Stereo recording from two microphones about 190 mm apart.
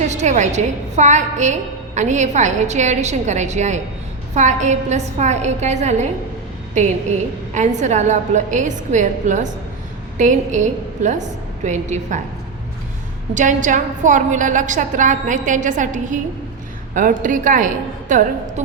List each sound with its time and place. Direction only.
0.0 s a woman's voice: 35° right (ahead or behind)
13.3 s a woman's voice: 40° right (ahead or behind)